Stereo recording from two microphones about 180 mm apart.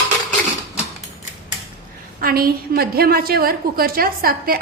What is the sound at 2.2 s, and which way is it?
A woman's voice, 55° right (ahead or behind).